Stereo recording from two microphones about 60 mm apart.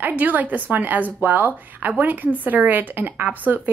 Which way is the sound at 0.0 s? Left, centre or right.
Right.